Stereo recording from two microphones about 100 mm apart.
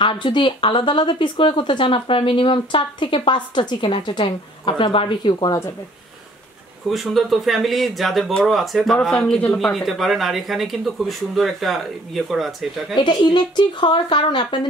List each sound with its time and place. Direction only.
0.0 s a woman's voice: 55° left (ahead or behind)
6.9 s speech: centre (ahead or behind)
12.9 s speech: 55° left (ahead or behind)